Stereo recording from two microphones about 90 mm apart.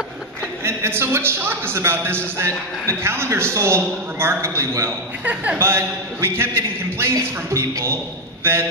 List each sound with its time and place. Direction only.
0.7 s a man's voice: 25° right (ahead or behind)
5.2 s speech: 15° right (ahead or behind)
5.6 s a man's voice: 30° right (ahead or behind)